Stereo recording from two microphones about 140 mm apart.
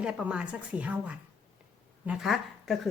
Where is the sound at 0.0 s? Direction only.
5° right (ahead or behind).